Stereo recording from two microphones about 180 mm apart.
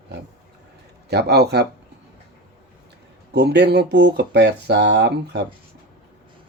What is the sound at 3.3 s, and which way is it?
Speech, 65° right (ahead or behind).